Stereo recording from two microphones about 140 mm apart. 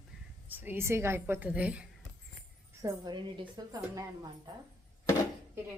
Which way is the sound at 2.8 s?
30° right (ahead or behind).